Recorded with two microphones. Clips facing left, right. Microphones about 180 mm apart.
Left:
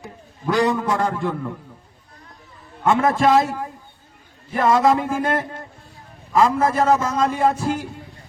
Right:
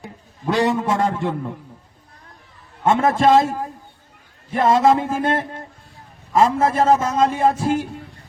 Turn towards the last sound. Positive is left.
turn(degrees=-25)  # may be behind; listen again after turning